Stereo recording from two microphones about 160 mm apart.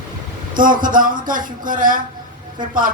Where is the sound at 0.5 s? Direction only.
55° right (ahead or behind).